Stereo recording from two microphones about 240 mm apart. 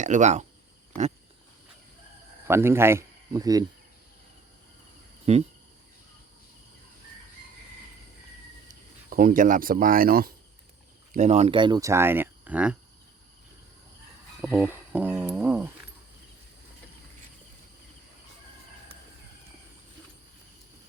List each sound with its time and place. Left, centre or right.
0.0 s speech: right
2.5 s speech: centre
5.3 s speech: right
8.6 s speech: right; by 12.7 s centre
14.4 s speech: centre